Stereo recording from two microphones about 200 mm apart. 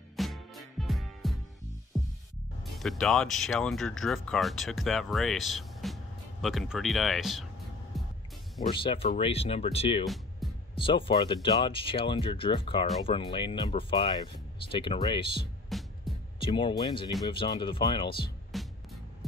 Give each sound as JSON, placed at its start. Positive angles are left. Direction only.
{"t": 0.1, "sound": "music", "side_deg": 0}
{"t": 2.6, "sound": "speech", "side_deg": 0}
{"t": 7.9, "sound": "music", "side_deg": 0}
{"t": 8.6, "sound": "speech", "side_deg": 25}
{"t": 10.0, "sound": "music", "side_deg": 0}
{"t": 10.8, "sound": "speech", "side_deg": 25}
{"t": 15.7, "sound": "music", "side_deg": 0}
{"t": 16.3, "sound": "speech", "side_deg": 25}
{"t": 18.5, "sound": "music", "side_deg": 0}